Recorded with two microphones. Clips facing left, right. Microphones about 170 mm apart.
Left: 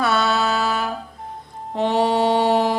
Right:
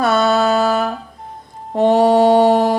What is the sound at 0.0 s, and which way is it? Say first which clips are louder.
Music: right 5 dB; 45° right (ahead or behind).